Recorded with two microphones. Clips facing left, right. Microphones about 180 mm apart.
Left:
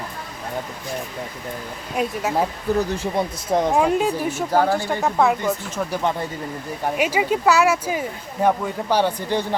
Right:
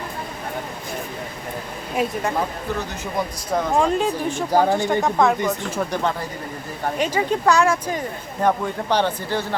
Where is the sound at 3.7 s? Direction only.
10° left (ahead or behind).